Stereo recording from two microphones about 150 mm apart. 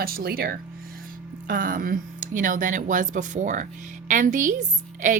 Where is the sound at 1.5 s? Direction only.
65° right (ahead or behind).